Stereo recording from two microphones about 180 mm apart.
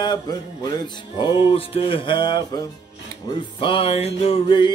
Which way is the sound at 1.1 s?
25° left (ahead or behind).